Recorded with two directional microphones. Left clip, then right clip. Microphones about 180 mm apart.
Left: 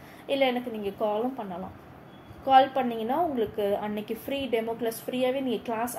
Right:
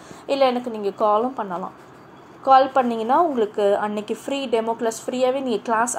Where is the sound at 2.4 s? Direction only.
30° right (ahead or behind).